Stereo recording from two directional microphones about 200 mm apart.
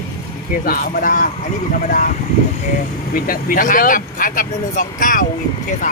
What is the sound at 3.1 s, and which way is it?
Speech, 45° left (ahead or behind).